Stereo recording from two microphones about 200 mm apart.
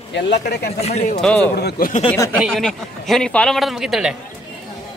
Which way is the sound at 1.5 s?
55° left (ahead or behind).